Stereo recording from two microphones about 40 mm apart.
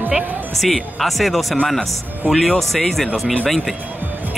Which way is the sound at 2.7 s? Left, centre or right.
Centre.